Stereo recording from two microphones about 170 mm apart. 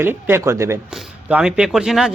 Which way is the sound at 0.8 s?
5° right (ahead or behind).